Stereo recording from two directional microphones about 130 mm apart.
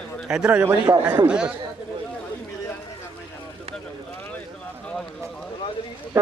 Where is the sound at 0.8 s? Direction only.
30° right (ahead or behind).